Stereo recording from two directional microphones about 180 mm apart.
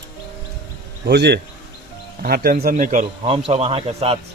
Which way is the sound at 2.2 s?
55° right (ahead or behind).